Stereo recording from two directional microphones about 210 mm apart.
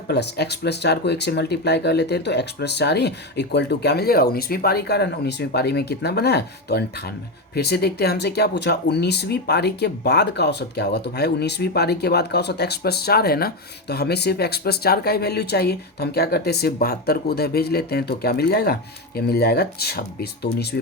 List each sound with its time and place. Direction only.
0.1 s speech: 50° left (ahead or behind)